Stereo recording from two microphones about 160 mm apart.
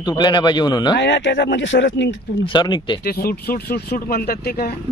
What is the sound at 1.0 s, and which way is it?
Speech, 90° left.